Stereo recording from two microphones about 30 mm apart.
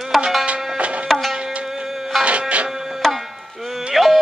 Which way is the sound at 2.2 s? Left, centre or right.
Right.